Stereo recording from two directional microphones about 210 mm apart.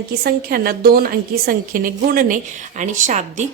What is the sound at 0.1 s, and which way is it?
A woman's voice, 50° right (ahead or behind).